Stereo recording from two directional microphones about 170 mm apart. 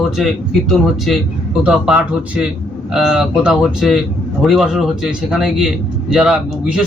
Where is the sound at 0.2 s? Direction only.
Centre (ahead or behind).